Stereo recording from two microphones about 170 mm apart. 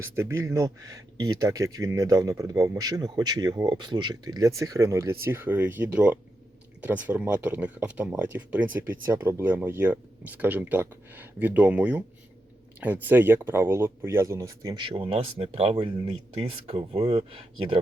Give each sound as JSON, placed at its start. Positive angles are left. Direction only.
{"t": 0.0, "sound": "speech", "side_deg": -15}